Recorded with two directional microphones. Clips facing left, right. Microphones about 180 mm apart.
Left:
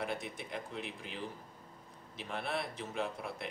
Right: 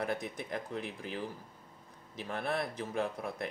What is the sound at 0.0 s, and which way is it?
Speech, 45° right (ahead or behind).